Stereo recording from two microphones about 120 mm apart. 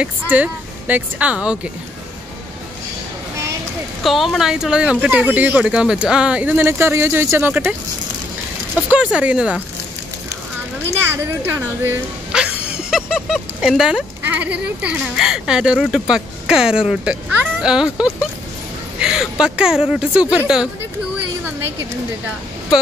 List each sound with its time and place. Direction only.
0.0 s speech: 15° right (ahead or behind)
4.0 s speech: centre (ahead or behind); by 7.6 s 15° right (ahead or behind)
8.9 s speech: 10° right (ahead or behind)
10.9 s speech: 20° right (ahead or behind)
12.3 s a sound: 5° right (ahead or behind)
12.9 s speech: 5° right (ahead or behind)
18.9 s speech: 5° right (ahead or behind)